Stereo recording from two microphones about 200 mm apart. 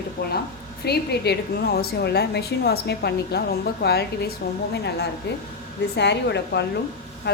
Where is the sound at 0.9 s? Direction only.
55° left (ahead or behind).